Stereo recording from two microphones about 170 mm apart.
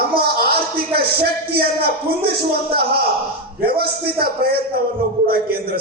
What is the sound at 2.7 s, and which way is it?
A man's voice, 65° right (ahead or behind).